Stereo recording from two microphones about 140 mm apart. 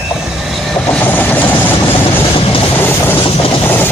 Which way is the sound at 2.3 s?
40° left (ahead or behind).